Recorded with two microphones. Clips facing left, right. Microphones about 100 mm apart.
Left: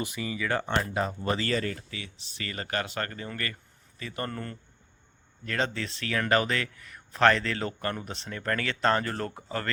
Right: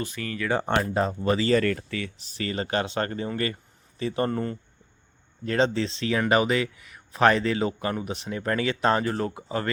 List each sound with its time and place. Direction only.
0.0 s speech: 10° left (ahead or behind)
0.6 s speech: 30° right (ahead or behind)
1.5 s speech: 55° right (ahead or behind); by 9.7 s 15° right (ahead or behind)